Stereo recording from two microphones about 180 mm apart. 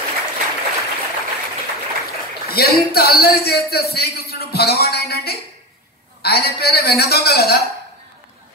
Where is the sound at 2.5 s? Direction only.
60° left (ahead or behind).